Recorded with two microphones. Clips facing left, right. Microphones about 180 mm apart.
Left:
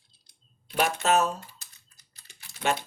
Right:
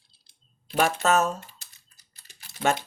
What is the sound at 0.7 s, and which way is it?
Speech, 45° right (ahead or behind).